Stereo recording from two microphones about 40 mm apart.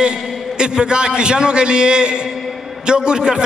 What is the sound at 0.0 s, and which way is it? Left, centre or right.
A man's voice, right.